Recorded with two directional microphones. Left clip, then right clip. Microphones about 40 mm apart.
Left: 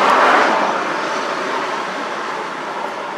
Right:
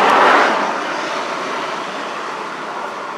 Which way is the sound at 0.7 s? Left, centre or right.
Centre.